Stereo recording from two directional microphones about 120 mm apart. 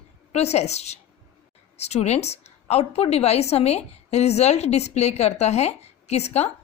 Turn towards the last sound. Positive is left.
turn(degrees=60)  # may be behind; listen again after turning